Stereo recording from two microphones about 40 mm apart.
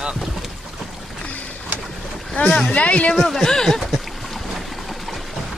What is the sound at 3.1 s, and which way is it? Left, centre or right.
Speech, centre.